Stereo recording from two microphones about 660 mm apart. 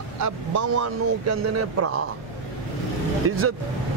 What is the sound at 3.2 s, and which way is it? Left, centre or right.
Speech, centre.